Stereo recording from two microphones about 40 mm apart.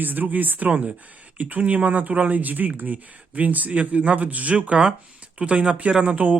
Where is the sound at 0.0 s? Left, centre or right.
Right.